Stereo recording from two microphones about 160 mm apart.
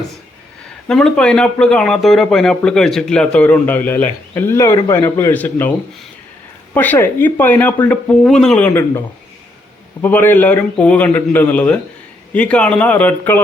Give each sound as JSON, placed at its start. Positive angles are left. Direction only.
{"t": 0.9, "sound": "a man's voice", "side_deg": 5}
{"t": 6.7, "sound": "speech", "side_deg": 10}
{"t": 10.0, "sound": "speech", "side_deg": 10}